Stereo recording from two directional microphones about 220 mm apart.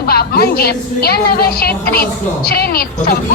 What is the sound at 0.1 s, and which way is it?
A woman's voice, 45° left (ahead or behind).